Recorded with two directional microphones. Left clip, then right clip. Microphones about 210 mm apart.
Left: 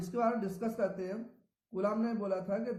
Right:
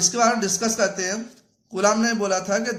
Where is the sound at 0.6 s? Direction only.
25° right (ahead or behind).